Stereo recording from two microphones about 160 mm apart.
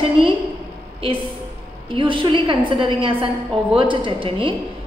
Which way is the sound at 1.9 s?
30° right (ahead or behind).